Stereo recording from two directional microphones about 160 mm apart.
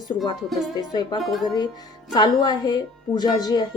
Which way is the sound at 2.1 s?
25° left (ahead or behind).